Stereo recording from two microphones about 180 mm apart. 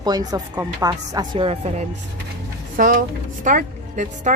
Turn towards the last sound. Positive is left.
turn(degrees=-45)  # may be behind; listen again after turning